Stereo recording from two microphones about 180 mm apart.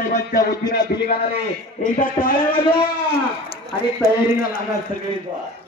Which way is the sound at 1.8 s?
50° left (ahead or behind).